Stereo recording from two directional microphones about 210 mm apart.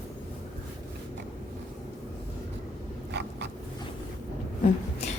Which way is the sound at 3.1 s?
55° right (ahead or behind).